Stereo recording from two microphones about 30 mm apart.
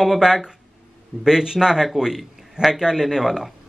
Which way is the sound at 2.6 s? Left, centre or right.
Right.